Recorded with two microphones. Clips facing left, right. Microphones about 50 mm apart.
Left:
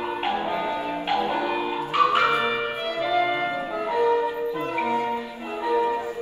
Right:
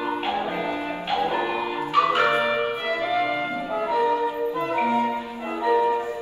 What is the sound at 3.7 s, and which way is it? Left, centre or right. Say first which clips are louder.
Music: even; right.